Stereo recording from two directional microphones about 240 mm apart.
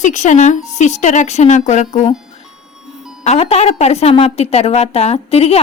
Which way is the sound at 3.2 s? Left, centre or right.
Left.